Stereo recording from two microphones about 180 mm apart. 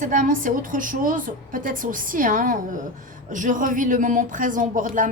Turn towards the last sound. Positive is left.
turn(degrees=-45)  # may be behind; listen again after turning